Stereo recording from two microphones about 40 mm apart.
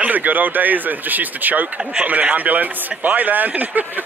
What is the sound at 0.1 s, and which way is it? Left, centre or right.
A woman's voice, right.